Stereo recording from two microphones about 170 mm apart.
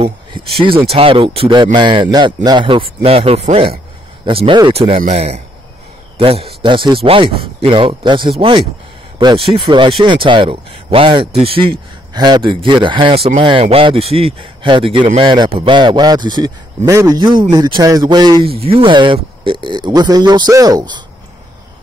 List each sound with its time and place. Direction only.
0.9 s a man's voice: 30° right (ahead or behind)